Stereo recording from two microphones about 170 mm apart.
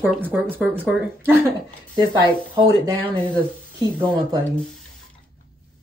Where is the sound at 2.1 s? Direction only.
30° right (ahead or behind).